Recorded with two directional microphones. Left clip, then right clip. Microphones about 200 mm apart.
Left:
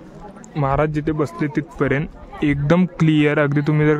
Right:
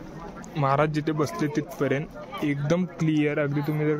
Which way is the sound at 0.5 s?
35° left (ahead or behind).